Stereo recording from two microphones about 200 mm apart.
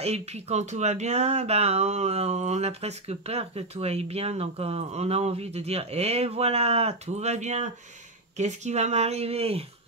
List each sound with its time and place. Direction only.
0.0 s speech: 30° right (ahead or behind)